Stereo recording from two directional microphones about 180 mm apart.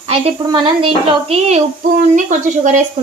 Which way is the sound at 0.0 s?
35° right (ahead or behind).